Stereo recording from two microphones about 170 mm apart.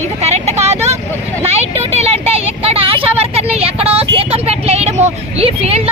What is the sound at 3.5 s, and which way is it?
Vehicle, 35° right (ahead or behind).